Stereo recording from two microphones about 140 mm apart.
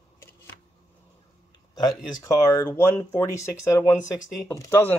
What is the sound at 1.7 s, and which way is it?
Speech, 30° left (ahead or behind).